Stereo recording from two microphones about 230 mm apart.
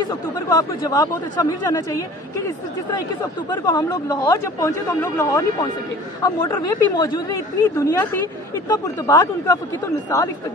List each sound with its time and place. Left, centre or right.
0.1 s speech: centre
3.6 s speech: centre